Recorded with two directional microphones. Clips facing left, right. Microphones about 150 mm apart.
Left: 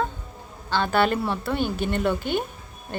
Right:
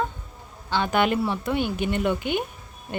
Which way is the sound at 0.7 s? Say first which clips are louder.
Left 1 dB; 15° right (ahead or behind).